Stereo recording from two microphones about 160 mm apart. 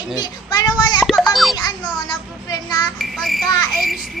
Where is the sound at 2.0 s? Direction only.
25° left (ahead or behind).